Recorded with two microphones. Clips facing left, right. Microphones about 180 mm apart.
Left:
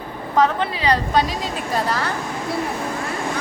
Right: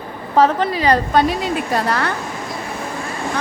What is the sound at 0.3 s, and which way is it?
A woman's voice, 40° right (ahead or behind).